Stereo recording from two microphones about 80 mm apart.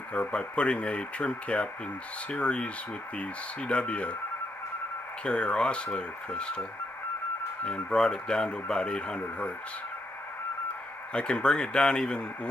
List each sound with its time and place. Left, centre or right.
0.1 s speech: centre
5.2 s speech: centre
7.6 s speech: centre
11.1 s speech: centre